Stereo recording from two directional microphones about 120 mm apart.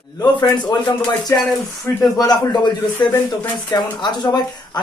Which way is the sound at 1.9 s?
25° left (ahead or behind).